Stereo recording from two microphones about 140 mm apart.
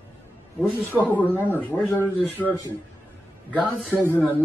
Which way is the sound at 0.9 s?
10° left (ahead or behind).